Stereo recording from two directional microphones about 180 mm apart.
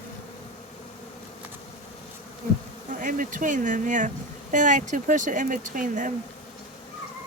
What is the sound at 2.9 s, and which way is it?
Speech, 45° right (ahead or behind).